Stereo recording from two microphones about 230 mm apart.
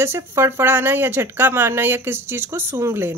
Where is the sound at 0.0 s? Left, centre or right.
Centre.